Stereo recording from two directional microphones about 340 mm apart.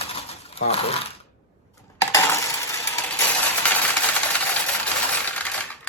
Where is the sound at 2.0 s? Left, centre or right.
Centre.